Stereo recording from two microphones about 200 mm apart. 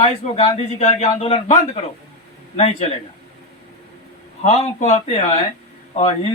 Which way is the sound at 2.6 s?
30° left (ahead or behind).